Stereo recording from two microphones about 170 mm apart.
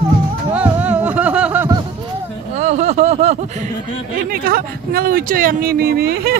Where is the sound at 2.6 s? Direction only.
40° right (ahead or behind).